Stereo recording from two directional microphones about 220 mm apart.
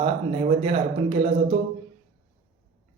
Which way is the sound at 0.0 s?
25° right (ahead or behind).